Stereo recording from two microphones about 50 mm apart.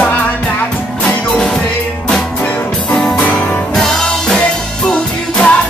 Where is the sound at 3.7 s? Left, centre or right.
Centre.